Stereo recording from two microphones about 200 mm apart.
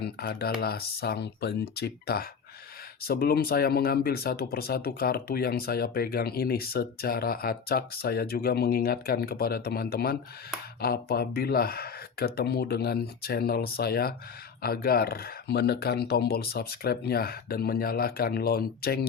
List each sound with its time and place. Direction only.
0.0 s speech: 50° left (ahead or behind)